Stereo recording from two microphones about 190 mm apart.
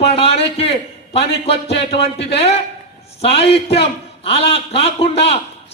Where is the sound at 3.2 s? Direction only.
30° left (ahead or behind).